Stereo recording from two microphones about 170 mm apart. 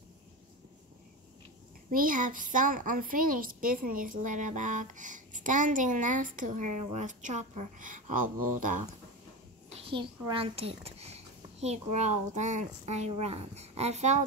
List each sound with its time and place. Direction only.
1.9 s a child's voice: 55° right (ahead or behind)
9.7 s a child's voice: 30° right (ahead or behind)